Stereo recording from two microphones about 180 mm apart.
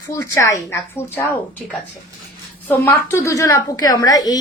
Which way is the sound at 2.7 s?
10° left (ahead or behind).